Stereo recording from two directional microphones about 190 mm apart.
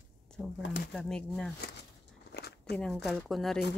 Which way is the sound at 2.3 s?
60° left (ahead or behind).